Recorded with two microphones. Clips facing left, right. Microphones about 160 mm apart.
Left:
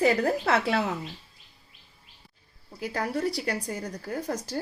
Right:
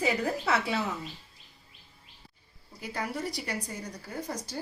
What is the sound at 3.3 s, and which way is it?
Speech, 50° left (ahead or behind).